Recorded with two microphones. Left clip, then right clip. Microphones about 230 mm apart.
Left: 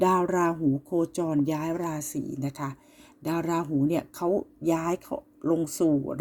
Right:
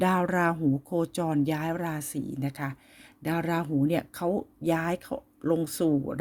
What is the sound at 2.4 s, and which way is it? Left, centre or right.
Speech, right.